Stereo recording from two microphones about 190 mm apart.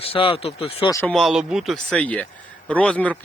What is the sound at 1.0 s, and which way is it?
Speech, centre (ahead or behind).